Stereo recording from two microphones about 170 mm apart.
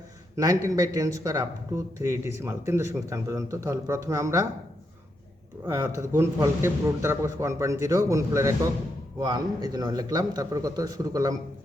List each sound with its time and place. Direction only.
0.3 s speech: 20° right (ahead or behind)
5.6 s a man's voice: 15° right (ahead or behind)